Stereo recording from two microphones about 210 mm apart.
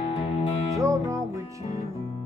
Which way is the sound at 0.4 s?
15° right (ahead or behind).